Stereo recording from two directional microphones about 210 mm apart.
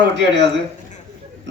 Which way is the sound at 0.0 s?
55° right (ahead or behind).